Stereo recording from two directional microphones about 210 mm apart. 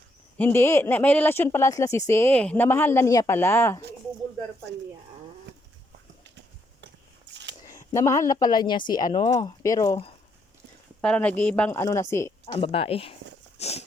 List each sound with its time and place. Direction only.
0.3 s speech: 10° left (ahead or behind)
7.6 s speech: 15° left (ahead or behind)
11.0 s speech: 5° left (ahead or behind)
12.5 s speech: 25° left (ahead or behind)
13.6 s walk: 30° left (ahead or behind)